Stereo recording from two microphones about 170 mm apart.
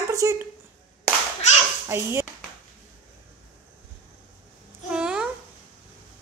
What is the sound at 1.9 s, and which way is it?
Speech, 15° right (ahead or behind).